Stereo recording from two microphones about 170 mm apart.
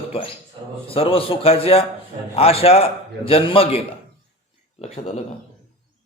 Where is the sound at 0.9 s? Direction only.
35° left (ahead or behind).